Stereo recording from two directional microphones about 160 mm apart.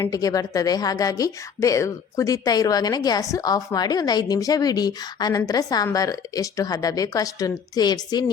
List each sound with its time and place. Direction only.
0.0 s a woman's voice: 20° left (ahead or behind)